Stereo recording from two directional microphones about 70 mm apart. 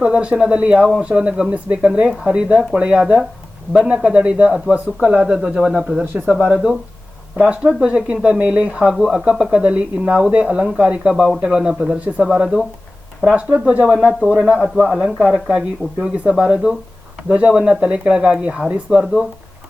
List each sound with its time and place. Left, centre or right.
0.0 s speech: centre
7.3 s speech: centre
11.1 s a man's voice: centre
14.9 s speech: centre